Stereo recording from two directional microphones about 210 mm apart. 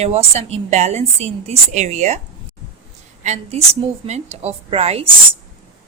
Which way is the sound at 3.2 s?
30° right (ahead or behind).